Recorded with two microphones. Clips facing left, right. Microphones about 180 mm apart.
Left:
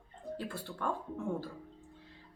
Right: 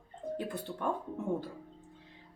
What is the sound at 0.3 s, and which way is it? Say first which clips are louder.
Speech: right 2 dB; 20° right (ahead or behind).